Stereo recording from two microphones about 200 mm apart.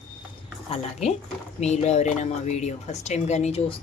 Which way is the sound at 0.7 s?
30° left (ahead or behind).